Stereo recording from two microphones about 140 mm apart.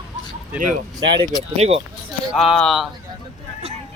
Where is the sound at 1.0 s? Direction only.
35° right (ahead or behind).